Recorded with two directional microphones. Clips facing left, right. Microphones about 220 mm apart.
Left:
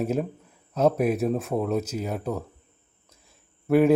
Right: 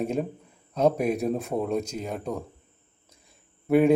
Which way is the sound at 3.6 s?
Centre (ahead or behind).